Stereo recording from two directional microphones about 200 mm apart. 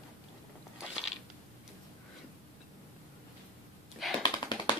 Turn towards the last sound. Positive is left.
turn(degrees=25)  # may be behind; listen again after turning